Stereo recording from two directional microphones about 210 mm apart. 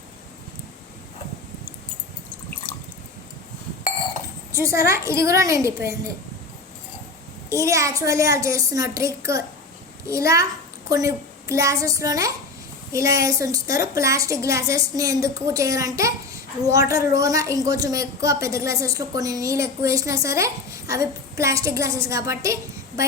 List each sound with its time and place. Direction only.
4.5 s a woman's voice: 15° right (ahead or behind)
7.5 s a woman's voice: 15° right (ahead or behind)